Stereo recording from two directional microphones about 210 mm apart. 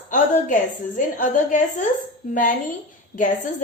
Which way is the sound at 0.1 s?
35° left (ahead or behind).